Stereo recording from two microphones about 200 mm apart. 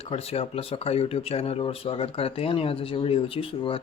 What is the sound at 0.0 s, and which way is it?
Speech, 30° left (ahead or behind).